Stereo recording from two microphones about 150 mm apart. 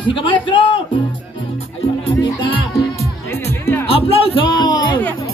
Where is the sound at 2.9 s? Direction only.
20° left (ahead or behind).